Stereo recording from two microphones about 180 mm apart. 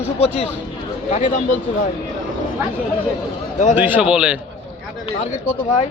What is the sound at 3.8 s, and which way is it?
Speech, 10° right (ahead or behind).